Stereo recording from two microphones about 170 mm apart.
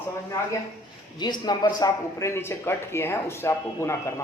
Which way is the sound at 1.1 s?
25° left (ahead or behind).